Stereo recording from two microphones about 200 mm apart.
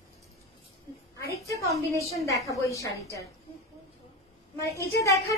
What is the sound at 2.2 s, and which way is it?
Speech, 15° left (ahead or behind).